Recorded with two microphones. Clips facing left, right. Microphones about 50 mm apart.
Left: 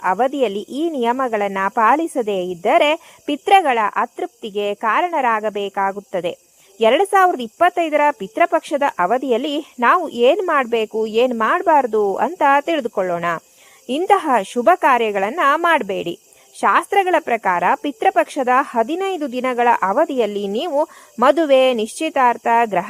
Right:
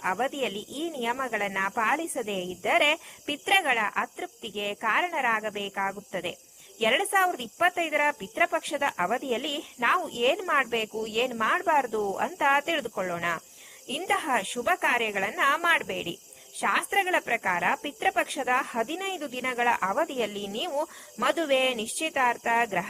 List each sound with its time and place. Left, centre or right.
0.0 s speech: left
1.2 s speech: left
5.7 s speech: left
13.0 s cricket: left
14.1 s speech: left